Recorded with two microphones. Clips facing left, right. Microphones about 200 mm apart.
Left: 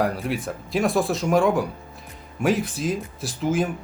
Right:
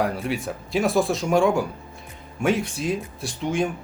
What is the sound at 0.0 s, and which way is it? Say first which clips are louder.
Speech: even; centre (ahead or behind).